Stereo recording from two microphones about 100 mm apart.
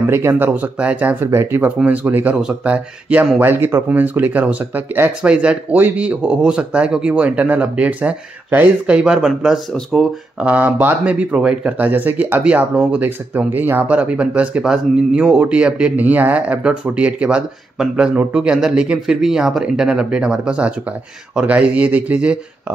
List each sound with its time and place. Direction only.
0.0 s speech: 25° right (ahead or behind)